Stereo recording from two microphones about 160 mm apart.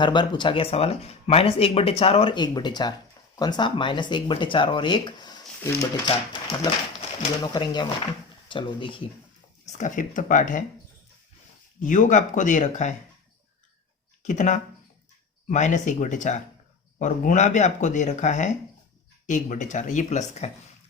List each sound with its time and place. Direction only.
0.0 s speech: 30° left (ahead or behind)
7.4 s speech: 25° left (ahead or behind)
9.6 s speech: 50° left (ahead or behind)
11.8 s speech: 55° left (ahead or behind)
14.2 s speech: 50° left (ahead or behind)